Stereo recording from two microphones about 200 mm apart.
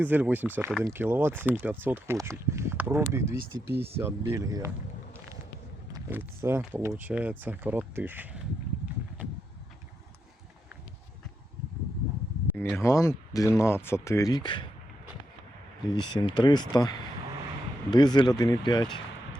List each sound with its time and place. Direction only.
0.0 s speech: 10° right (ahead or behind)
5.9 s speech: 10° right (ahead or behind)
12.7 s speech: 15° left (ahead or behind)
16.2 s speech: 20° left (ahead or behind)
17.9 s speech: 20° left (ahead or behind)